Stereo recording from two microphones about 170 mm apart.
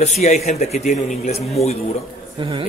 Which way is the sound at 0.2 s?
40° left (ahead or behind).